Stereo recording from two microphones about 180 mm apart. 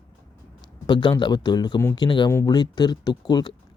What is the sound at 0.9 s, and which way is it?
Speech, 25° left (ahead or behind).